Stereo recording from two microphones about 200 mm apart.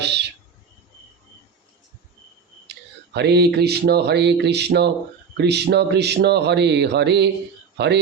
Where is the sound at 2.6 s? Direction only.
55° right (ahead or behind).